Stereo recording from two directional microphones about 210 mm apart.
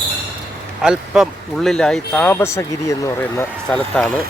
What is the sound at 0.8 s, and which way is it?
Speech, 5° right (ahead or behind).